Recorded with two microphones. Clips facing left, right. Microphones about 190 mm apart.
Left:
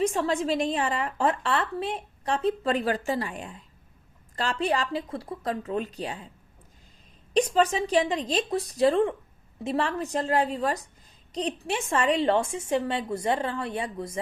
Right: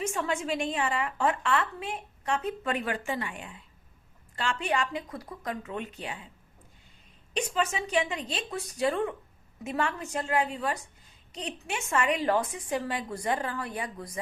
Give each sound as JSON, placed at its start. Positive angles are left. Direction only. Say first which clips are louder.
{"t": 0.0, "sound": "a woman's voice", "louder": "left 6 dB", "side_deg": 35}
{"t": 7.3, "sound": "a woman's voice", "louder": "left 7 dB", "side_deg": 35}